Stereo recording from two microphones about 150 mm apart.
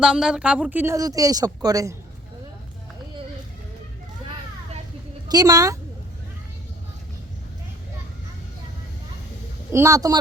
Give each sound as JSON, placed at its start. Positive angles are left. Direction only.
{"t": 0.0, "sound": "a woman's voice", "side_deg": -5}
{"t": 5.3, "sound": "a woman's voice", "side_deg": -25}
{"t": 9.7, "sound": "a woman's voice", "side_deg": -20}